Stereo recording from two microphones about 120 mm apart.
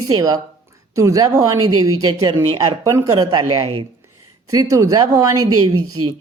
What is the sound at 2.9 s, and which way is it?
Speech, 25° right (ahead or behind).